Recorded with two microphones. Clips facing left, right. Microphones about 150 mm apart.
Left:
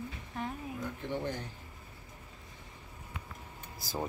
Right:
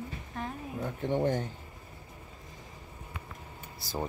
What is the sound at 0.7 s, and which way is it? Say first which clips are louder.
Speech: right 10 dB; 40° right (ahead or behind).